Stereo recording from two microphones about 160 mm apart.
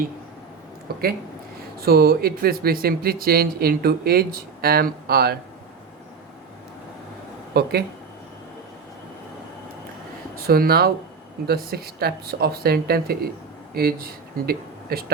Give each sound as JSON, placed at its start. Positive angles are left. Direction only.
{"t": 0.9, "sound": "a sound", "side_deg": -70}
{"t": 1.8, "sound": "speech", "side_deg": -75}
{"t": 7.5, "sound": "speech", "side_deg": -90}
{"t": 10.3, "sound": "speech", "side_deg": -65}